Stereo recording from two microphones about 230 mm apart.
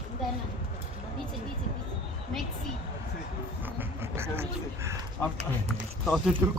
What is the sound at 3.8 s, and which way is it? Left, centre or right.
Vehicle, centre.